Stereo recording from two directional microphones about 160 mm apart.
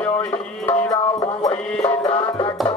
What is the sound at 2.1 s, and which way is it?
Music, 35° left (ahead or behind).